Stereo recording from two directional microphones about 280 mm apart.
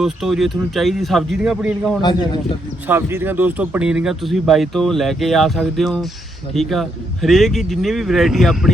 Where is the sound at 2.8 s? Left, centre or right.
Centre.